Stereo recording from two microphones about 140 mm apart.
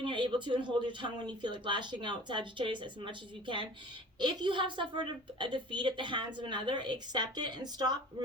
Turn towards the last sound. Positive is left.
turn(degrees=-30)  # may be behind; listen again after turning